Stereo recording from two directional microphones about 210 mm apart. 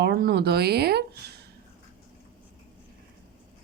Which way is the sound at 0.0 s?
50° right (ahead or behind).